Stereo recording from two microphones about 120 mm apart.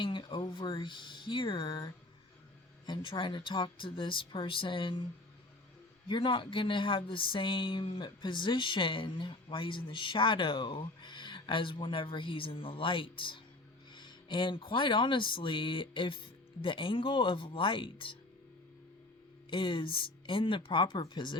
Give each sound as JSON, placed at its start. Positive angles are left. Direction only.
{"t": 0.0, "sound": "a sound", "side_deg": 40}
{"t": 2.8, "sound": "speech", "side_deg": 40}
{"t": 6.1, "sound": "speech", "side_deg": 45}
{"t": 19.5, "sound": "speech", "side_deg": 45}